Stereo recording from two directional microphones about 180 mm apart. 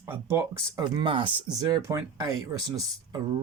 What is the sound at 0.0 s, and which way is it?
Speech, 15° right (ahead or behind).